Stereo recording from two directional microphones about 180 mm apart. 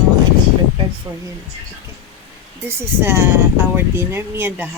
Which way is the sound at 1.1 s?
15° right (ahead or behind).